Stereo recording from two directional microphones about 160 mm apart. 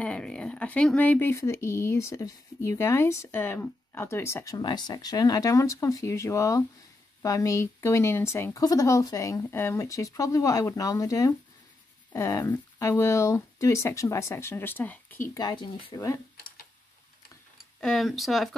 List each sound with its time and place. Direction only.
0.0 s speech: 5° left (ahead or behind)
15.3 s speech: 30° left (ahead or behind)
17.7 s speech: centre (ahead or behind)